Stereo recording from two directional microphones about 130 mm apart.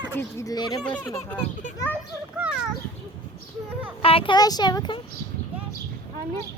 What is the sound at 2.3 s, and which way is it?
Speech, 10° right (ahead or behind).